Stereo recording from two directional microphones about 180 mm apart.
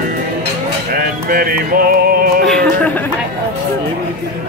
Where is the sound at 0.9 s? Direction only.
55° right (ahead or behind).